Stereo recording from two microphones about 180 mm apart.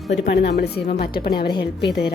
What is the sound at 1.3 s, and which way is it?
Speech, 25° left (ahead or behind).